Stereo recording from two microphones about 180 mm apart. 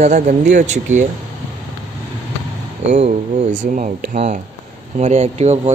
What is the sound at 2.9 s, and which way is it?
A man's voice, 40° right (ahead or behind).